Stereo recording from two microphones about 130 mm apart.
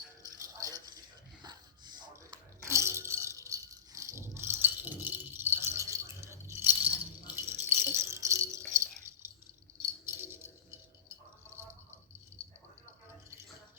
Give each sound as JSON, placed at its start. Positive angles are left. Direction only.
{"t": 0.2, "sound": "music", "side_deg": -30}
{"t": 2.6, "sound": "rattle", "side_deg": -20}
{"t": 10.1, "sound": "keys jangling", "side_deg": -15}
{"t": 12.4, "sound": "a sound", "side_deg": -20}